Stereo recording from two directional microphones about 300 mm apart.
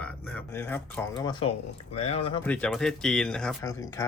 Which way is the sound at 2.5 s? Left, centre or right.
Centre.